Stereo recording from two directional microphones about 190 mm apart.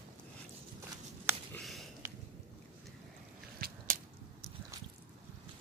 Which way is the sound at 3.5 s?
50° right (ahead or behind).